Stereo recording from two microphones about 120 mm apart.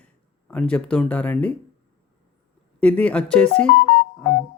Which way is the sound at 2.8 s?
10° left (ahead or behind).